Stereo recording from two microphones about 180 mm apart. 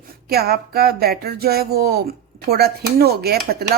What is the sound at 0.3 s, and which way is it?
A woman's voice, 60° right (ahead or behind).